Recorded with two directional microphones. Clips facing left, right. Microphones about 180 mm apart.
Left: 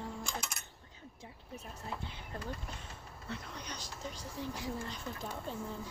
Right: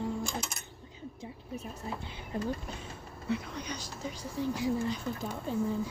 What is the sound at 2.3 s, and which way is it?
Speech, 15° right (ahead or behind).